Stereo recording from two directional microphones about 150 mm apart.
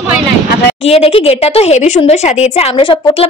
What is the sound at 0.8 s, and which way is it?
Speech, 40° left (ahead or behind).